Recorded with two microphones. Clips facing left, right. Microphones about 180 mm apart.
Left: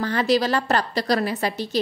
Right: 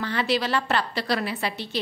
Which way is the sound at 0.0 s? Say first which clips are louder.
Left 5 dB; 40° left (ahead or behind).